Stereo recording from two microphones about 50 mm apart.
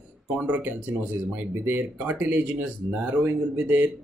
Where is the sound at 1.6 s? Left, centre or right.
Right.